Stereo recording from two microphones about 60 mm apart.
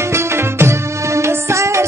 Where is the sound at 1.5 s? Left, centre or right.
Right.